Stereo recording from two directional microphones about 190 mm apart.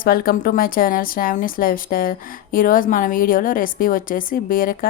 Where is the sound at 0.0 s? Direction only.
50° left (ahead or behind).